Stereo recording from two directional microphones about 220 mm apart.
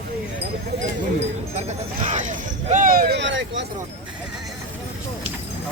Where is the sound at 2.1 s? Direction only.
35° right (ahead or behind); by 3.7 s 55° right (ahead or behind).